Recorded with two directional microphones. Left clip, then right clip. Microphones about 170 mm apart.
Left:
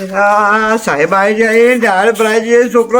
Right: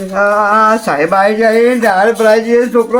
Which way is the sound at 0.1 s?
45° left (ahead or behind).